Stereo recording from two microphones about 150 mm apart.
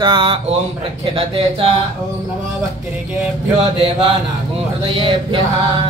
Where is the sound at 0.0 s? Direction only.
30° right (ahead or behind).